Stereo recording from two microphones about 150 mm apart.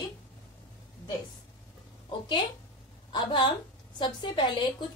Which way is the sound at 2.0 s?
30° left (ahead or behind).